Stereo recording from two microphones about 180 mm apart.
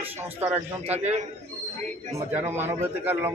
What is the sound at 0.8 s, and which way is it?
Speech, 35° right (ahead or behind).